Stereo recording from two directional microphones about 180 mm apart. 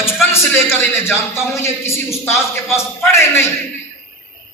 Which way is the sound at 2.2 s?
15° left (ahead or behind).